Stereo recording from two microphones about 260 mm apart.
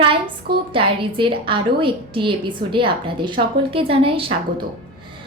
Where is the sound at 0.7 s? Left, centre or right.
Centre.